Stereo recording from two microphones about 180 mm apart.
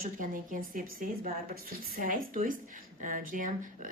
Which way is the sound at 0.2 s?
50° right (ahead or behind).